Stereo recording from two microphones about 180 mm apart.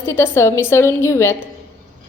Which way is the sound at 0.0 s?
15° left (ahead or behind).